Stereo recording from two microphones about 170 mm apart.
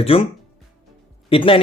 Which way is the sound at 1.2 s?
30° left (ahead or behind).